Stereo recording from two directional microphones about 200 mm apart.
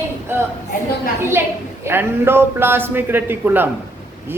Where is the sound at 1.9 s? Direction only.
10° right (ahead or behind).